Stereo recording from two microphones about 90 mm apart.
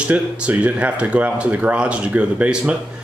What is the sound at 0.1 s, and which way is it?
Speech, 15° right (ahead or behind).